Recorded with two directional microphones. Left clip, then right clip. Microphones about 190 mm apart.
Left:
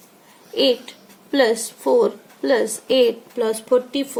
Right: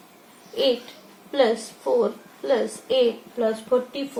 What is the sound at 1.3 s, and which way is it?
Speech, 40° left (ahead or behind).